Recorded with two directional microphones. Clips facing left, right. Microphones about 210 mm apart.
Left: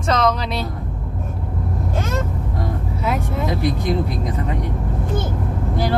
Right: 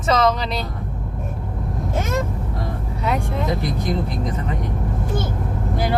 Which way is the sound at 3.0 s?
Centre (ahead or behind).